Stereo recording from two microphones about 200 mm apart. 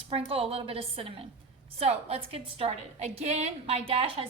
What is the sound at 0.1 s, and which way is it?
A woman's voice, 30° right (ahead or behind).